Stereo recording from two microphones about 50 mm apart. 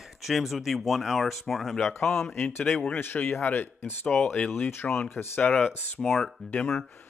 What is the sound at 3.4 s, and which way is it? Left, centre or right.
Speech, left.